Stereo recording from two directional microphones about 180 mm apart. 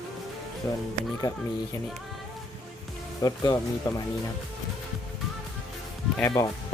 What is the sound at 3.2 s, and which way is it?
Speech, 20° left (ahead or behind).